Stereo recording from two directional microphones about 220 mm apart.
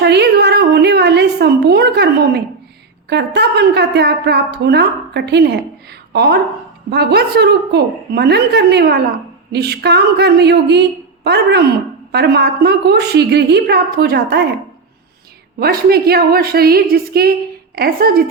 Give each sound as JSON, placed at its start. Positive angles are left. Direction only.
{"t": 0.0, "sound": "a sound", "side_deg": -50}
{"t": 3.1, "sound": "a woman's voice", "side_deg": -50}
{"t": 15.5, "sound": "a woman's voice", "side_deg": -45}